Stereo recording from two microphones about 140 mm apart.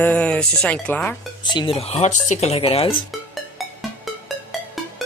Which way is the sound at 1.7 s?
50° left (ahead or behind).